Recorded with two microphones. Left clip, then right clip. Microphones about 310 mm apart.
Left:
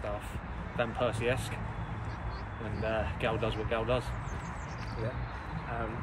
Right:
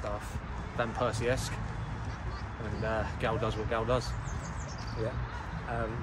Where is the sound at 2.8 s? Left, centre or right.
Centre.